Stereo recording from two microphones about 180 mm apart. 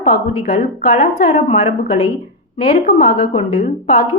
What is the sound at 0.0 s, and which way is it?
A woman's voice, 45° left (ahead or behind).